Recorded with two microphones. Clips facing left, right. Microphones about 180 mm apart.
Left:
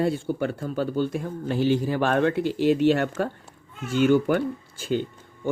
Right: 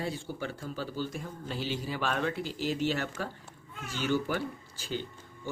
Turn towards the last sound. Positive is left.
turn(degrees=55)  # may be behind; listen again after turning